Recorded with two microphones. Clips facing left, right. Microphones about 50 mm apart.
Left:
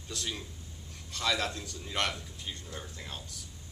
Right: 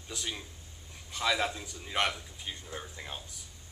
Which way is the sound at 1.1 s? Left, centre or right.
Centre.